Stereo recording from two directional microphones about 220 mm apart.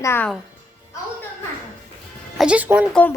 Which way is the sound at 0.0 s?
10° left (ahead or behind).